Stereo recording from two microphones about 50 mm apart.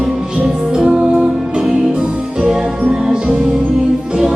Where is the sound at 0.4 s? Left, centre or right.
Centre.